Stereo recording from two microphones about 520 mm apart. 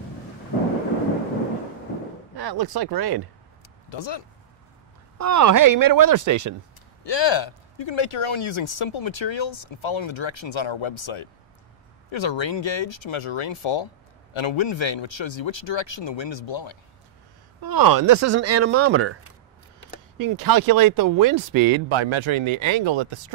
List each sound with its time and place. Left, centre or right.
2.3 s speech: right
3.9 s speech: left
5.1 s speech: right
7.0 s speech: left
17.6 s speech: right
20.2 s speech: right
21.8 s speech: right